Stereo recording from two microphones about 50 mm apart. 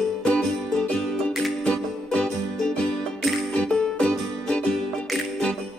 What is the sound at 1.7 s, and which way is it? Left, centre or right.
Music, centre.